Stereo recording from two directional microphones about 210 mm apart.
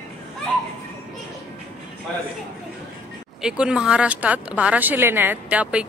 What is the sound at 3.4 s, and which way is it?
Speech, 5° right (ahead or behind).